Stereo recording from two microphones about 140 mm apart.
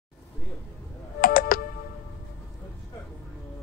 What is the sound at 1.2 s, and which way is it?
Computer keyboard, 90° left.